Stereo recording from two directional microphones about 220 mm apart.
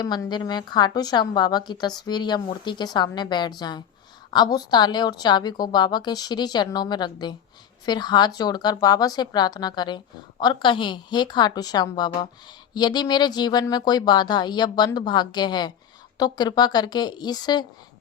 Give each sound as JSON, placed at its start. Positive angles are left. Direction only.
{"t": 0.0, "sound": "speech", "side_deg": 20}